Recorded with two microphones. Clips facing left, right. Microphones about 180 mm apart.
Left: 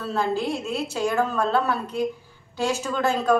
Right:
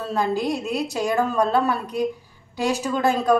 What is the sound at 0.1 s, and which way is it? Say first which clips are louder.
A woman's voice: right 2 dB; 15° right (ahead or behind).